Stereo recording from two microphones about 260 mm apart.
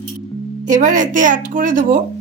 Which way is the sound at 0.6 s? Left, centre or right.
Right.